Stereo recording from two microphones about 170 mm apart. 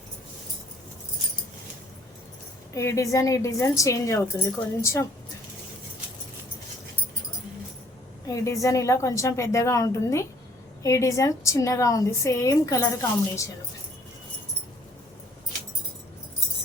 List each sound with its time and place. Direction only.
2.7 s a woman's voice: 20° left (ahead or behind)
8.3 s a woman's voice: 20° left (ahead or behind)